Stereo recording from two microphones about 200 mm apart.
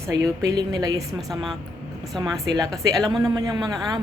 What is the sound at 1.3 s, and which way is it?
Speech, centre (ahead or behind).